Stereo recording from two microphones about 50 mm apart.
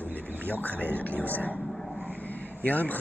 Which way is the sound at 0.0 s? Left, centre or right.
Right.